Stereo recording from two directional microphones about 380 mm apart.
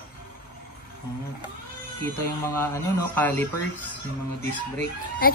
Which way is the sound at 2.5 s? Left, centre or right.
Centre.